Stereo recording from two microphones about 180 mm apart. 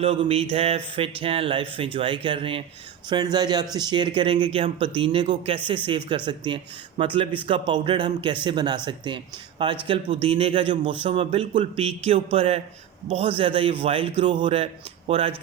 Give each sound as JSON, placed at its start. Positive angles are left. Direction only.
{"t": 0.0, "sound": "speech", "side_deg": -30}